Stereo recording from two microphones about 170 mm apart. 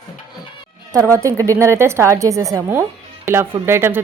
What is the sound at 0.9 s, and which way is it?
Speech, 20° right (ahead or behind).